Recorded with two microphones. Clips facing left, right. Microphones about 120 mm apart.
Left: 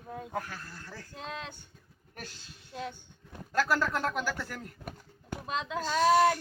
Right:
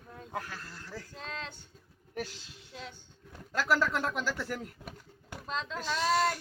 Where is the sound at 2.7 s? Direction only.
50° left (ahead or behind).